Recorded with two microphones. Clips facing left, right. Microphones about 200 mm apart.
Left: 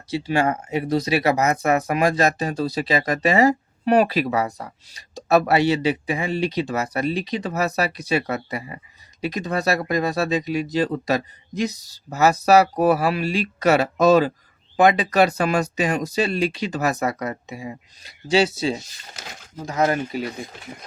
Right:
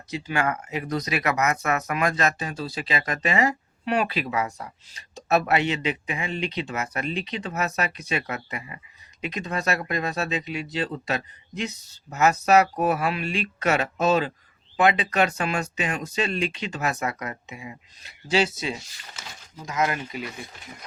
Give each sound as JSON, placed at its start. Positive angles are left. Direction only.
{"t": 0.1, "sound": "speech", "side_deg": 30}